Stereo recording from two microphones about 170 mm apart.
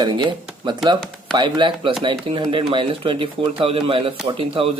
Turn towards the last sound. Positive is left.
turn(degrees=-35)  # may be behind; listen again after turning